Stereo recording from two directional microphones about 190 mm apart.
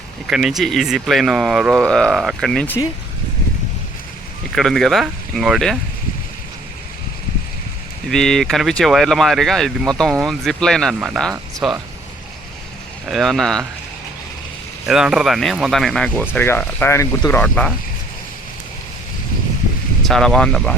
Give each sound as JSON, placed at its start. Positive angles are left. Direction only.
{"t": 0.3, "sound": "speech", "side_deg": 0}
{"t": 4.5, "sound": "speech", "side_deg": 0}
{"t": 8.1, "sound": "speech", "side_deg": 5}
{"t": 13.1, "sound": "speech", "side_deg": 0}
{"t": 14.8, "sound": "speech", "side_deg": -5}
{"t": 20.0, "sound": "speech", "side_deg": 0}